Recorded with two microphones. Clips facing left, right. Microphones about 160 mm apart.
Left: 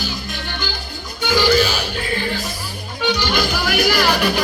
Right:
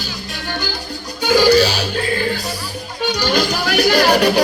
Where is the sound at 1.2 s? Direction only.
40° right (ahead or behind).